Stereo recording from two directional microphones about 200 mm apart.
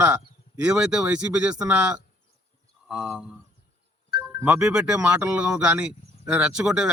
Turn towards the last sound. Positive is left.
turn(degrees=-5)  # may be behind; listen again after turning